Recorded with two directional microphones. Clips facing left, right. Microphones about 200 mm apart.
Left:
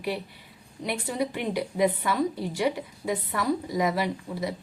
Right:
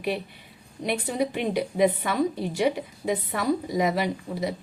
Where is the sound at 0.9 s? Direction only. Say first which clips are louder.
Right 3 dB; 20° right (ahead or behind).